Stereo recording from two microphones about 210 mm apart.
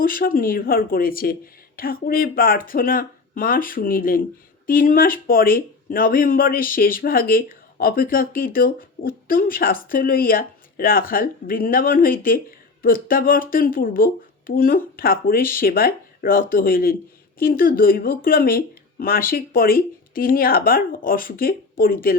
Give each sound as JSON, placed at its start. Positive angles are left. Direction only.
{"t": 0.0, "sound": "speech", "side_deg": 40}